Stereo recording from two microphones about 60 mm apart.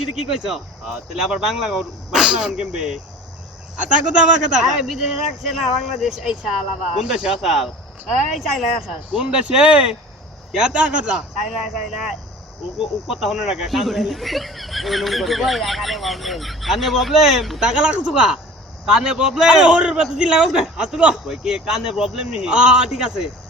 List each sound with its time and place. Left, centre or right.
0.2 s a man's voice: centre
7.5 s speech: centre
9.1 s a man's voice: centre
11.4 s speech: centre
17.6 s a man's voice: centre